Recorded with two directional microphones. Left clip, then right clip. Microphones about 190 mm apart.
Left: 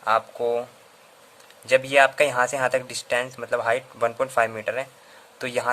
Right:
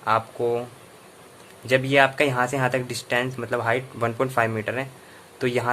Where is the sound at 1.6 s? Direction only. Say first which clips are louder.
Left 1 dB; 25° left (ahead or behind).